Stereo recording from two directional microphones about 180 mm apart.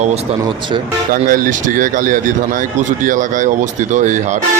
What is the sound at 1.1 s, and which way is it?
Speech, 50° right (ahead or behind).